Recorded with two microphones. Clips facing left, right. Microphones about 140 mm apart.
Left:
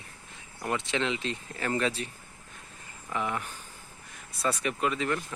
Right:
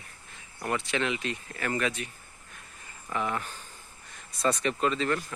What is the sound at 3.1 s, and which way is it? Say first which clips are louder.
Speech: right 1 dB; 15° left (ahead or behind).